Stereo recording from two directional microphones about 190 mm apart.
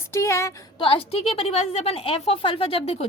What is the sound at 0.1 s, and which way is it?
Speech, 15° left (ahead or behind).